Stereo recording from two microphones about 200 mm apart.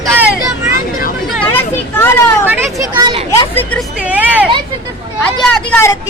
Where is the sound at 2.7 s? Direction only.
20° right (ahead or behind).